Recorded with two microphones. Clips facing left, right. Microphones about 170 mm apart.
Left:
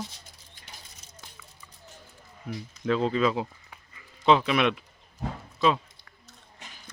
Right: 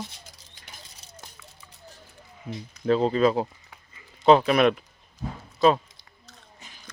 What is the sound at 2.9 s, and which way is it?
Speech, 35° right (ahead or behind).